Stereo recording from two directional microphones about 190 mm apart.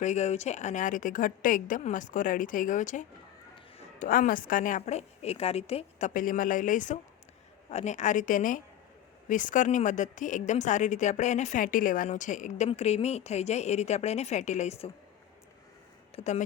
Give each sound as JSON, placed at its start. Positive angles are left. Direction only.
{"t": 0.0, "sound": "a woman's voice", "side_deg": 35}
{"t": 6.1, "sound": "a woman's voice", "side_deg": 45}
{"t": 16.1, "sound": "speech", "side_deg": 35}